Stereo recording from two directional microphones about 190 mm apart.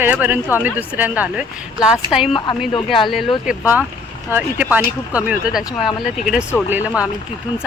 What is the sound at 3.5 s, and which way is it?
Speech, 10° right (ahead or behind).